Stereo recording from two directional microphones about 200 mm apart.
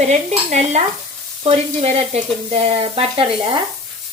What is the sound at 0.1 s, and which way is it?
Stir, 35° right (ahead or behind).